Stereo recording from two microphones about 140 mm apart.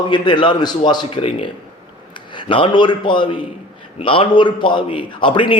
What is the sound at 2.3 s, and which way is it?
Speech, 35° left (ahead or behind).